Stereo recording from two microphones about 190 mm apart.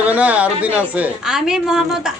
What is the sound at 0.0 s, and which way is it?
A woman's voice, 5° right (ahead or behind).